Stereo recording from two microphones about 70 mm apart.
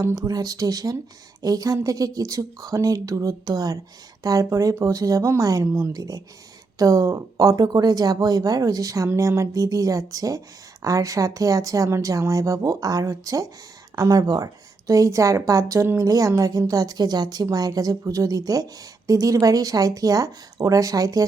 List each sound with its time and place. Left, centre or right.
0.2 s a woman's voice: right
17.4 s a woman's voice: right